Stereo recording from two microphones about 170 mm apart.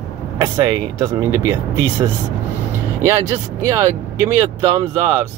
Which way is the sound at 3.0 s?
15° right (ahead or behind).